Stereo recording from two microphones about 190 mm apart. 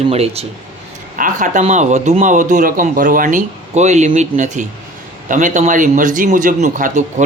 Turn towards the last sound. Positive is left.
turn(degrees=-40)  # may be behind; listen again after turning